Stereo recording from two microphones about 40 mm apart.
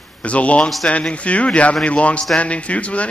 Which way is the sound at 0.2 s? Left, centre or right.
Left.